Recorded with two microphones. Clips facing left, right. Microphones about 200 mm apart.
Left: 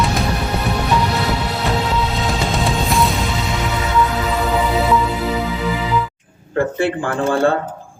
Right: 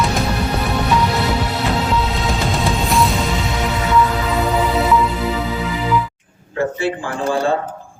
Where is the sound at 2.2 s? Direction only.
Centre (ahead or behind).